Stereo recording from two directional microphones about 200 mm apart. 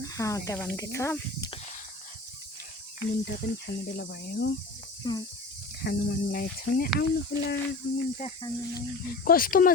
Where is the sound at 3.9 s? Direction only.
55° left (ahead or behind).